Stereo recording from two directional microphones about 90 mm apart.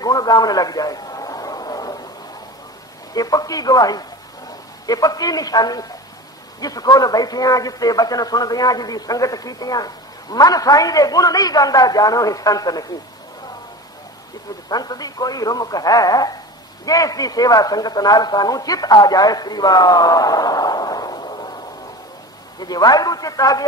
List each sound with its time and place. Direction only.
0.0 s a sound: 45° left (ahead or behind)
3.2 s a man's voice: 45° left (ahead or behind)
14.7 s a man's voice: 45° left (ahead or behind)